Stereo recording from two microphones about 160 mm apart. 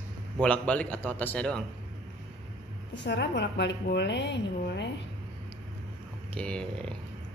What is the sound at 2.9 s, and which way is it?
A woman's voice, 90° left.